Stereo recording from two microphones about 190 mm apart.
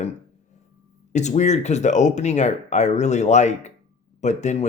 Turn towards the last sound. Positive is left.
turn(degrees=35)  # may be behind; listen again after turning